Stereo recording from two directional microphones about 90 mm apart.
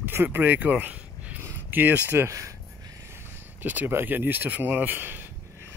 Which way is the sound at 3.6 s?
20° right (ahead or behind).